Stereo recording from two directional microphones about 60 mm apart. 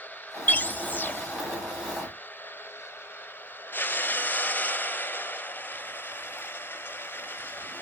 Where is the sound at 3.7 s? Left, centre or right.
Left.